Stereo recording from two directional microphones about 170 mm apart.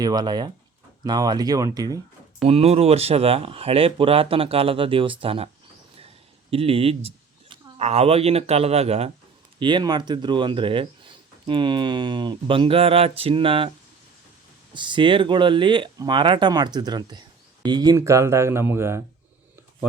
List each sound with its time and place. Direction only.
0.0 s speech: 25° right (ahead or behind)
2.4 s speech: 35° right (ahead or behind)
6.5 s speech: 35° right (ahead or behind)
9.6 s speech: 25° right (ahead or behind)
14.7 s speech: 25° right (ahead or behind)